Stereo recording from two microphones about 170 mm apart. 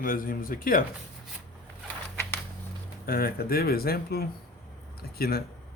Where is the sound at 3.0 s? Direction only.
65° left (ahead or behind).